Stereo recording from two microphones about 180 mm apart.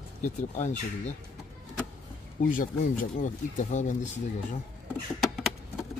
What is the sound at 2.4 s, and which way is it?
Speech, 50° left (ahead or behind).